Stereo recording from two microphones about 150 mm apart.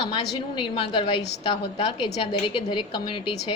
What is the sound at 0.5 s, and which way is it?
A woman's voice, 35° left (ahead or behind).